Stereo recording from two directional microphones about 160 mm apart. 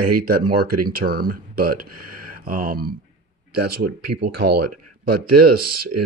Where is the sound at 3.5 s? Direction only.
90° right.